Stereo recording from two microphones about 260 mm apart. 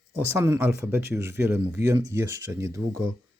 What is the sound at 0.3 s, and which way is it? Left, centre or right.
Speech, centre.